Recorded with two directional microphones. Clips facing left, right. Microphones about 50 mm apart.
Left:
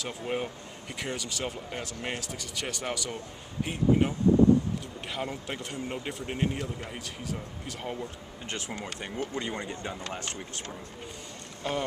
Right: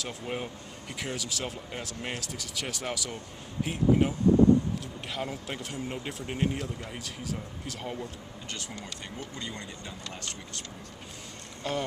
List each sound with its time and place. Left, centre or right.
0.0 s speech: centre
5.1 s speech: centre
8.5 s speech: left
11.6 s speech: centre